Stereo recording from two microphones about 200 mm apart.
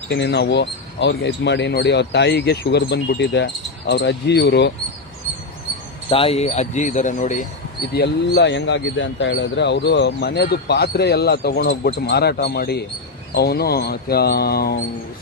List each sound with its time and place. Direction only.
0.1 s speech: 55° left (ahead or behind)
6.1 s speech: 30° left (ahead or behind)
7.9 s speech: 55° left (ahead or behind)